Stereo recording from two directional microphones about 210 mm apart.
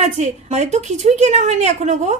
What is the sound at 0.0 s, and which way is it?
A woman's voice, 30° right (ahead or behind).